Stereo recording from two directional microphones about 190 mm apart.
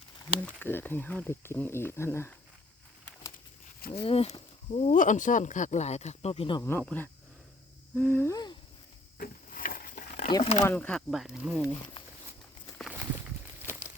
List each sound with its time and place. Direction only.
0.4 s speech: 10° left (ahead or behind)
3.8 s speech: 55° left (ahead or behind)
4.0 s speech: 30° left (ahead or behind)
6.6 s speech: 10° left (ahead or behind)
9.1 s a sound: 50° left (ahead or behind)
10.2 s speech: 30° left (ahead or behind)
10.6 s speech: 10° left (ahead or behind)
12.8 s walk: 10° right (ahead or behind)
13.7 s crumpling: 10° right (ahead or behind)